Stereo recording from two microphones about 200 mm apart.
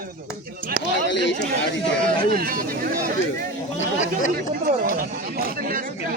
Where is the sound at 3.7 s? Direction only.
35° left (ahead or behind).